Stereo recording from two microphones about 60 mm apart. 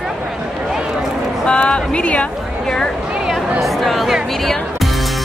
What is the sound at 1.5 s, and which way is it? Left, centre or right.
Speech, centre.